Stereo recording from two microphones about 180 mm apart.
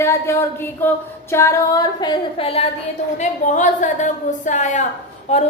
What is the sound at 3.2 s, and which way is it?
A woman's voice, 45° left (ahead or behind).